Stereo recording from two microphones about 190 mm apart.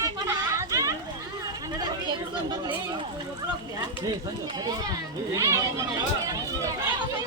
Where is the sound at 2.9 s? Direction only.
20° right (ahead or behind).